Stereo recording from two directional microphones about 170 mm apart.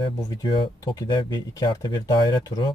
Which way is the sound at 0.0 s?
25° left (ahead or behind).